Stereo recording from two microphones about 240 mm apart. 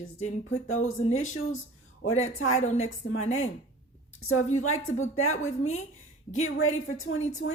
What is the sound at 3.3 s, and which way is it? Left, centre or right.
A woman's voice, left.